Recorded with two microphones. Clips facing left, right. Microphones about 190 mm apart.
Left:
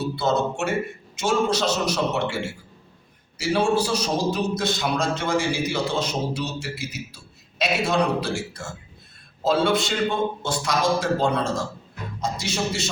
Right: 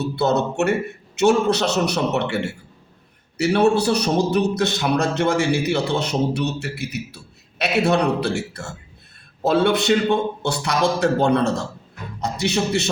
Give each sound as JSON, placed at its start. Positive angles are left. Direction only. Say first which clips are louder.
{"t": 0.2, "sound": "a man's voice", "louder": "right 5 dB", "side_deg": -65}